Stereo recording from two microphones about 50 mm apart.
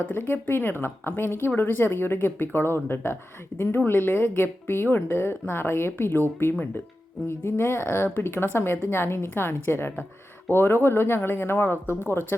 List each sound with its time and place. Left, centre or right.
0.0 s speech: left
7.3 s speech: left